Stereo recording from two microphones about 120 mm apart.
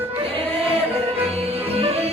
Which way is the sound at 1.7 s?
60° right (ahead or behind).